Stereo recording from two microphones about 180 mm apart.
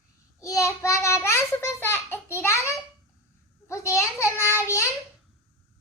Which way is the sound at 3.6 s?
15° left (ahead or behind).